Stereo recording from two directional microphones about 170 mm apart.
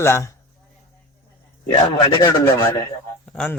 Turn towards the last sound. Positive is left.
turn(degrees=5)  # may be behind; listen again after turning